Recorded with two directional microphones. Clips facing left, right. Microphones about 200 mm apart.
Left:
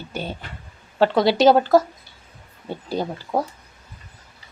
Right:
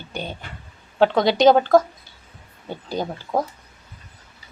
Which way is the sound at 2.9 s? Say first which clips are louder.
Even; centre (ahead or behind).